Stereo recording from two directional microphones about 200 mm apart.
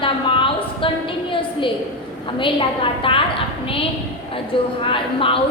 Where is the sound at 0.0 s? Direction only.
25° left (ahead or behind).